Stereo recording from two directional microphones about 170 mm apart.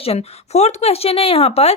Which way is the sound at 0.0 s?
35° left (ahead or behind).